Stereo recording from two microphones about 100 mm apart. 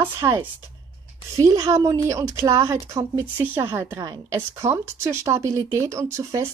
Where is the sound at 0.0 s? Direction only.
30° right (ahead or behind).